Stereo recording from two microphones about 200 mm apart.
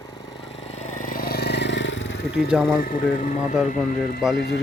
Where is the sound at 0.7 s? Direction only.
35° left (ahead or behind); by 2.4 s 65° left (ahead or behind).